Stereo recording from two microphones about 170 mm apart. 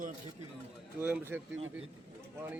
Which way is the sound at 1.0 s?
10° right (ahead or behind).